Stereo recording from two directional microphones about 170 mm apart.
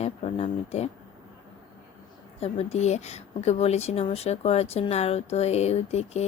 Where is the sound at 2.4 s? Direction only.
40° left (ahead or behind).